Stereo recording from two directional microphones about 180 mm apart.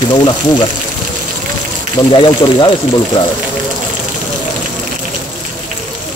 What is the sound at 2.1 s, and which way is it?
Speech, 25° left (ahead or behind).